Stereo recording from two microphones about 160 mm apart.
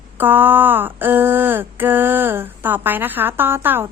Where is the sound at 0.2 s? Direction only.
10° right (ahead or behind).